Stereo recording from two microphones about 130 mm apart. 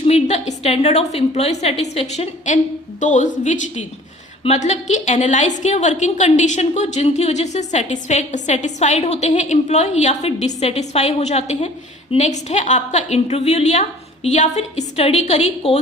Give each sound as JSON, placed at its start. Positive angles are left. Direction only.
{"t": 0.1, "sound": "a woman's voice", "side_deg": 60}
{"t": 3.0, "sound": "speech", "side_deg": 70}
{"t": 4.4, "sound": "a woman's voice", "side_deg": 60}